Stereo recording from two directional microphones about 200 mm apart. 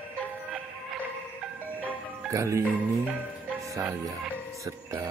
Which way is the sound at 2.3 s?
15° right (ahead or behind).